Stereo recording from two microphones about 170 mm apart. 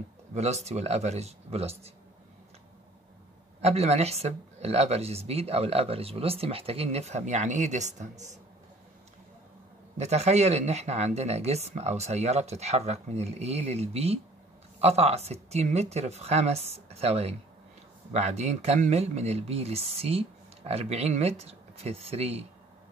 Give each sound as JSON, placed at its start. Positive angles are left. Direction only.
{"t": 0.3, "sound": "speech", "side_deg": -40}
{"t": 3.6, "sound": "speech", "side_deg": -40}
{"t": 9.9, "sound": "speech", "side_deg": -40}